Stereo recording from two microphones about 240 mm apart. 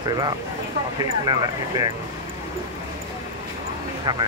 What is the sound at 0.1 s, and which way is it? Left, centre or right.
Speech, centre.